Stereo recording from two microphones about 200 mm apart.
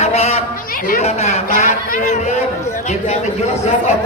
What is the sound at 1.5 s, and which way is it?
Speech, 45° left (ahead or behind).